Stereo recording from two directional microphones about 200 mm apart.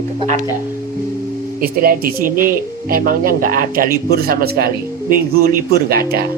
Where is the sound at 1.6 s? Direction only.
45° right (ahead or behind).